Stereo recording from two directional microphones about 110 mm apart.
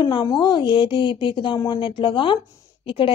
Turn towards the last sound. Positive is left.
turn(degrees=50)  # may be behind; listen again after turning